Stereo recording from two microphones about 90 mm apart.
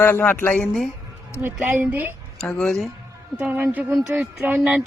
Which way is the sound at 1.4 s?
20° right (ahead or behind).